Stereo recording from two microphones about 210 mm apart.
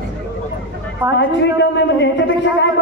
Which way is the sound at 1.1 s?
55° left (ahead or behind).